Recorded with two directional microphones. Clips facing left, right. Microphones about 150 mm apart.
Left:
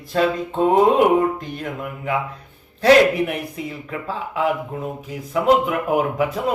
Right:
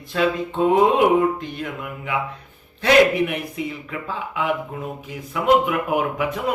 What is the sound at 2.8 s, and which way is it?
Speech, 35° left (ahead or behind).